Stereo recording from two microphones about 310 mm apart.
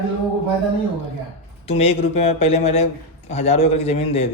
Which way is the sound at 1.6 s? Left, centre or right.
Centre.